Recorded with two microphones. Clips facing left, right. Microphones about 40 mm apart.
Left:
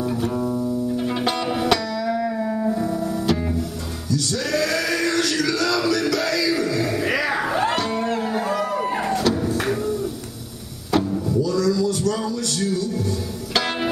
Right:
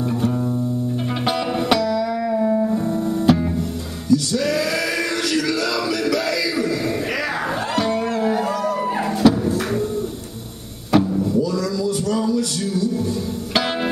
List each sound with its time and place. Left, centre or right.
0.1 s music: centre
3.0 s music: right
4.1 s music: centre
5.5 s music: centre
7.7 s a sound: centre
8.2 s a sound: centre
8.9 s music: centre
10.9 s music: centre
11.5 s a sound: centre